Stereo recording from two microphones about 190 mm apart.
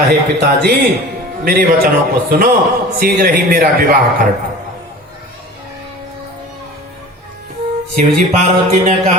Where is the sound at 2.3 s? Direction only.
50° right (ahead or behind).